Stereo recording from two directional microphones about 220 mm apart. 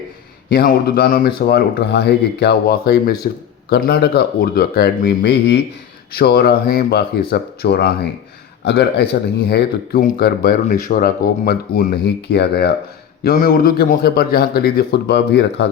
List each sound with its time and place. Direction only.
0.5 s speech: 45° left (ahead or behind)